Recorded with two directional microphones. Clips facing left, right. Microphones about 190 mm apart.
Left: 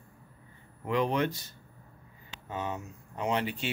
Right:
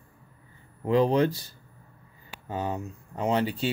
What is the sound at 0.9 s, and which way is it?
Speech, 35° right (ahead or behind).